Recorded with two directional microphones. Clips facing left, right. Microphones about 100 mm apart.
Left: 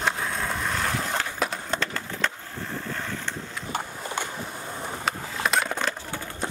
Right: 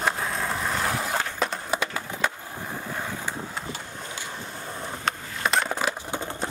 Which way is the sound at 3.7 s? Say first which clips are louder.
Left 4 dB; 55° left (ahead or behind).